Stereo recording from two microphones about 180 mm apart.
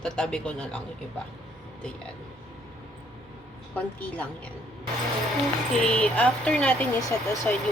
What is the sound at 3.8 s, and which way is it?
Speech, 10° left (ahead or behind).